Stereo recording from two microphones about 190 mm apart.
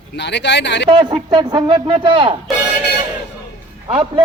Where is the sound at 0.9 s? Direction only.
25° right (ahead or behind).